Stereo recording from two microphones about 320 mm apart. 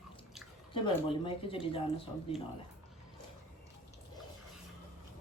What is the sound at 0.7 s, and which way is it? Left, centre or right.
A woman's voice, centre.